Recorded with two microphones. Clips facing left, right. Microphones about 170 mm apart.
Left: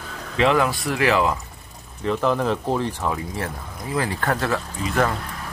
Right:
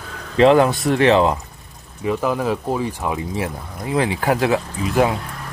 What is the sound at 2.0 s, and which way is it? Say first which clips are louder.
Speech: right 1 dB; 10° right (ahead or behind).